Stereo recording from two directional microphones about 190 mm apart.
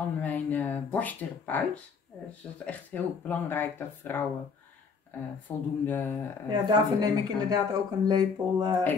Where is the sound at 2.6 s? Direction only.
10° left (ahead or behind).